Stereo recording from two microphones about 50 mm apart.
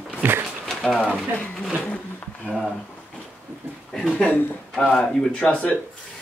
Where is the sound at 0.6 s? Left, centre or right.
Centre.